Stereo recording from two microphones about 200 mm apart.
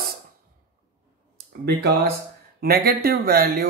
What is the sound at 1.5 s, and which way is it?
Speech, 55° right (ahead or behind).